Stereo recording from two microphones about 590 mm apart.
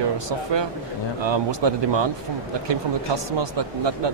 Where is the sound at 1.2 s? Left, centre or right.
Right.